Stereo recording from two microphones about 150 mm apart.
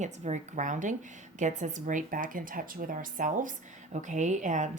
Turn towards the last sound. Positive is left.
turn(degrees=-55)  # may be behind; listen again after turning